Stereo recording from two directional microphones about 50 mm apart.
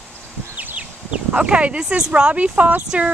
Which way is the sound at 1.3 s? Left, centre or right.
Right.